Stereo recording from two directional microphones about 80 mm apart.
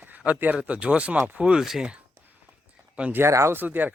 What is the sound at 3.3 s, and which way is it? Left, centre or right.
Speech, right.